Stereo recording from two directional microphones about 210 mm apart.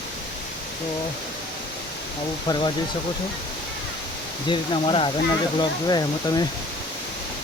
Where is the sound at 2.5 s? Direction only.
20° left (ahead or behind).